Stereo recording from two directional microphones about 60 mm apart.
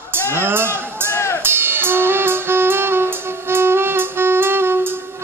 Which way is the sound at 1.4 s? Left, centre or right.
Right.